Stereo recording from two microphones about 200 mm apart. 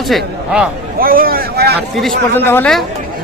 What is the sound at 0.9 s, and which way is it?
Speech, 45° right (ahead or behind).